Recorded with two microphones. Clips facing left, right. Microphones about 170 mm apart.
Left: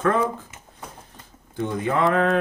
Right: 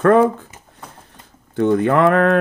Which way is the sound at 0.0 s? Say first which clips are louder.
Right 9 dB; 60° right (ahead or behind).